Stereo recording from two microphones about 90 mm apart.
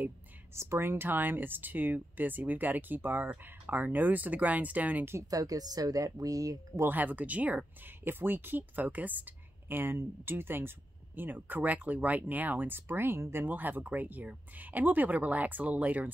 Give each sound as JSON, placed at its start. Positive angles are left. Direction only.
{"t": 0.6, "sound": "speech", "side_deg": -25}
{"t": 5.1, "sound": "speech", "side_deg": -40}
{"t": 6.9, "sound": "speech", "side_deg": -20}